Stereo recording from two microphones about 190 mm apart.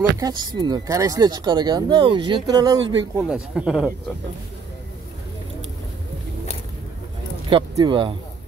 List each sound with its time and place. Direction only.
0.2 s speech: 20° right (ahead or behind)
3.3 s speech: 5° right (ahead or behind)
7.4 s speech: 25° right (ahead or behind)